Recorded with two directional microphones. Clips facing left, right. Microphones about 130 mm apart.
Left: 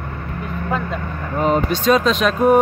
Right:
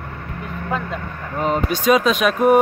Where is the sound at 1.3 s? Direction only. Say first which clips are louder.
Left 3 dB; 30° left (ahead or behind).